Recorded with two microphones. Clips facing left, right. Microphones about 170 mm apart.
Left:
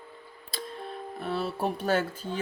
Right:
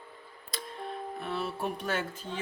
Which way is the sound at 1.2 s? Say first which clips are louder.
Left 5 dB; 30° left (ahead or behind).